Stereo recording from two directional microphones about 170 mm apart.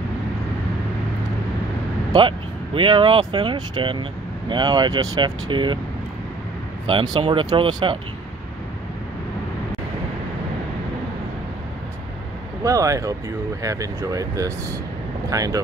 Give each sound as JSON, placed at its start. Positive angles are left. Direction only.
{"t": 2.1, "sound": "speech", "side_deg": -30}
{"t": 6.9, "sound": "speech", "side_deg": -30}
{"t": 12.6, "sound": "speech", "side_deg": -20}